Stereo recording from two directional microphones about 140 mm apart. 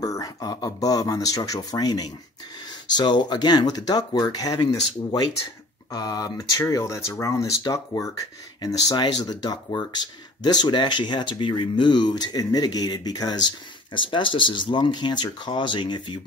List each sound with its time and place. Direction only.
0.0 s speech: 25° left (ahead or behind)
5.9 s speech: 25° left (ahead or behind)